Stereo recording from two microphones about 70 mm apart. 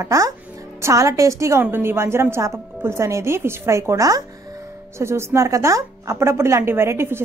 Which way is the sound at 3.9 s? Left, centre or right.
Right.